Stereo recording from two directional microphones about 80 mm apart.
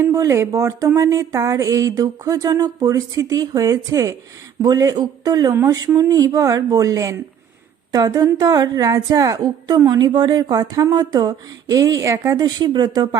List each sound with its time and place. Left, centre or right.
0.1 s a woman's voice: right
7.9 s a woman's voice: right
12.4 s speech: right